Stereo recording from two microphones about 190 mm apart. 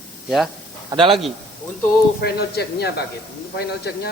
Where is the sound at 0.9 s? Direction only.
25° right (ahead or behind).